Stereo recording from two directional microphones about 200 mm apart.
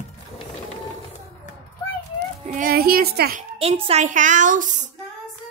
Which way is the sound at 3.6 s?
30° right (ahead or behind).